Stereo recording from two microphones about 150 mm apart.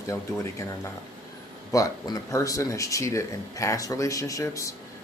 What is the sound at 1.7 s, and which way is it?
Speech, 25° left (ahead or behind).